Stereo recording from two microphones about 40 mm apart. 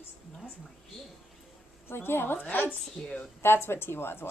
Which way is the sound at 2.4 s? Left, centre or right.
Left.